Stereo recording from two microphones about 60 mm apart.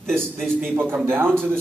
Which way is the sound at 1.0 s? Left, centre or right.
Right.